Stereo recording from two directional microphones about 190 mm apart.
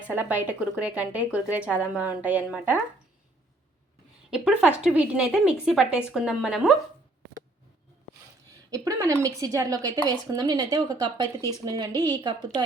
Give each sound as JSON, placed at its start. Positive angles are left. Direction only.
{"t": 0.4, "sound": "a woman's voice", "side_deg": -5}
{"t": 4.3, "sound": "a woman's voice", "side_deg": -5}
{"t": 8.7, "sound": "a woman's voice", "side_deg": -15}